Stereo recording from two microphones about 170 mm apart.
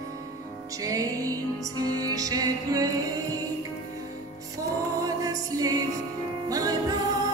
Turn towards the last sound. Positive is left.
turn(degrees=-20)  # may be behind; listen again after turning